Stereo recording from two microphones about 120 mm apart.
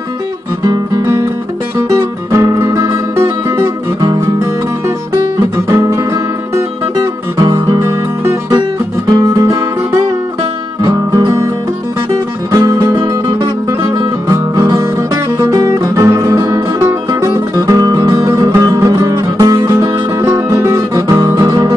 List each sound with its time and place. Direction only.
0.7 s guitar: 25° right (ahead or behind)
2.0 s music: 25° right (ahead or behind)
5.7 s guitar: 25° right (ahead or behind)
6.5 s music: 30° right (ahead or behind)
10.8 s music: 30° right (ahead or behind)
12.4 s music: 25° right (ahead or behind)